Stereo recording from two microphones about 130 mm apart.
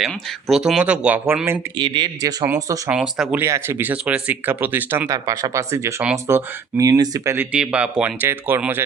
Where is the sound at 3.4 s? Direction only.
20° right (ahead or behind).